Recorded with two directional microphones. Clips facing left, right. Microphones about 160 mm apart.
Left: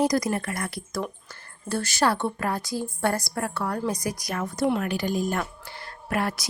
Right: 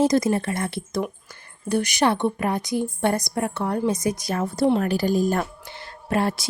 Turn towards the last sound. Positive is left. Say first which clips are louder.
# right 4 dB
turn(degrees=-25)  # may be behind; listen again after turning